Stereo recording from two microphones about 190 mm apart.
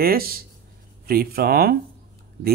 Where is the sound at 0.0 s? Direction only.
50° right (ahead or behind).